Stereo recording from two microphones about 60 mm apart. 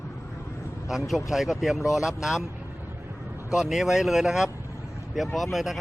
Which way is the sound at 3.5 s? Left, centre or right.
Centre.